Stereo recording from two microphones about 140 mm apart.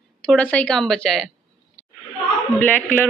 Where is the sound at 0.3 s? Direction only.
10° left (ahead or behind).